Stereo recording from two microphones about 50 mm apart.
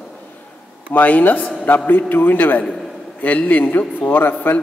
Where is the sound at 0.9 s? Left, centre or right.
Left.